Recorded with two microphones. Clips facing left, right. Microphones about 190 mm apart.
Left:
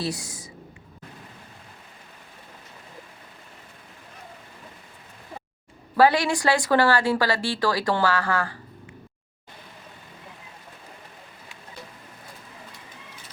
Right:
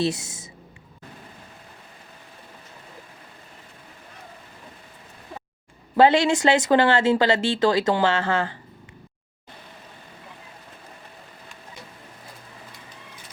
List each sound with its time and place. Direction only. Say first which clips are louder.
0.0 s speech: right 5 dB; 25° right (ahead or behind)
6.0 s speech: right 3 dB; 25° right (ahead or behind)